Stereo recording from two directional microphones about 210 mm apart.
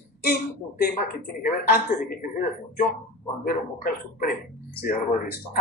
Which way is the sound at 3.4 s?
45° left (ahead or behind).